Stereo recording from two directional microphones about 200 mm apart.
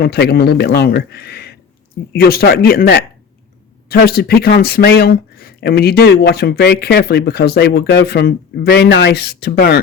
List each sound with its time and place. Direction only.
0.0 s speech: 55° left (ahead or behind)